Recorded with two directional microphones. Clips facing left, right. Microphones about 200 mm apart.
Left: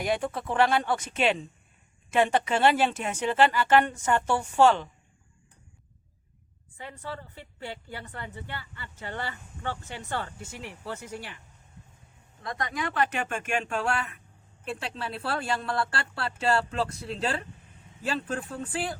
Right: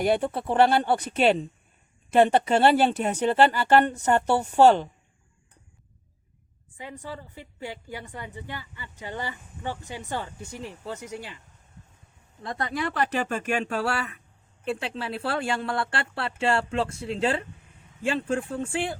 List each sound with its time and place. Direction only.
0.0 s speech: 35° right (ahead or behind)
6.7 s a woman's voice: 15° right (ahead or behind)
12.4 s speech: 30° right (ahead or behind)